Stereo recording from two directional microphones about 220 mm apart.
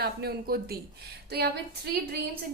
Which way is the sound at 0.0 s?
45° right (ahead or behind).